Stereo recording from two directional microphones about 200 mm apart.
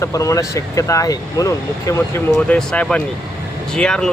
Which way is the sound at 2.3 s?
5° left (ahead or behind).